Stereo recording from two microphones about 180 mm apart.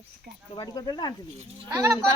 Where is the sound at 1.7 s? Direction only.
15° right (ahead or behind).